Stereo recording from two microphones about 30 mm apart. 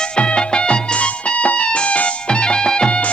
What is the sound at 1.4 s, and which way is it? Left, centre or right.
Music, left.